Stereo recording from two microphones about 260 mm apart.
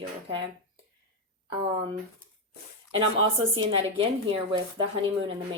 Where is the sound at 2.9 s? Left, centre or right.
Centre.